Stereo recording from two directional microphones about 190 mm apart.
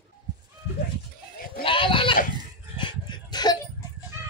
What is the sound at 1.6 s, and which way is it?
Goat, 25° left (ahead or behind).